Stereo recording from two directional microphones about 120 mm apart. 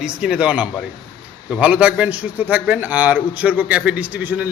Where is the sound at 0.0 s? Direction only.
5° right (ahead or behind).